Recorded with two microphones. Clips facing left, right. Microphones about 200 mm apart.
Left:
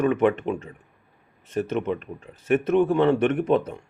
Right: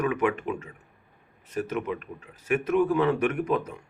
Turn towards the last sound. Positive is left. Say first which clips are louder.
# left 5 dB
turn(degrees=30)  # may be behind; listen again after turning